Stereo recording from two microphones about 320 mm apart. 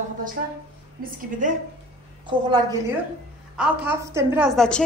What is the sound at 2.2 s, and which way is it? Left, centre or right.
A woman's voice, centre.